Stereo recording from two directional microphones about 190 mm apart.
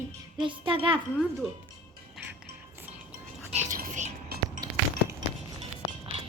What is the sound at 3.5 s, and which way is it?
Whispering, 40° right (ahead or behind).